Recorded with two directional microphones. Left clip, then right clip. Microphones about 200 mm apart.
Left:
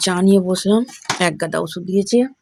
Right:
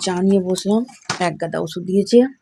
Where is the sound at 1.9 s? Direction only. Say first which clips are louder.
Right 3 dB; 10° right (ahead or behind).